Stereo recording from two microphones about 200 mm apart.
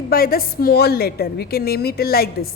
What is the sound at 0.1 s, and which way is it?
A woman's voice, 45° left (ahead or behind).